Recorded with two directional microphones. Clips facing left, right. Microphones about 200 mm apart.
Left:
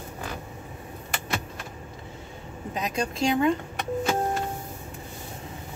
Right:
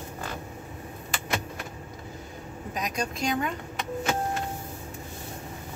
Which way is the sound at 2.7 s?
30° left (ahead or behind).